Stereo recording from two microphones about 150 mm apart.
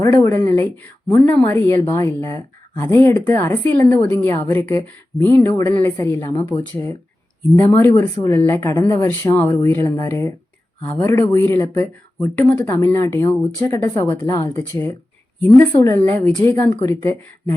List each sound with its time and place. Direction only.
0.0 s a woman's voice: 15° left (ahead or behind)
6.5 s a woman's voice: 10° left (ahead or behind); by 9.0 s 25° left (ahead or behind)
9.0 s a woman's voice: 10° left (ahead or behind)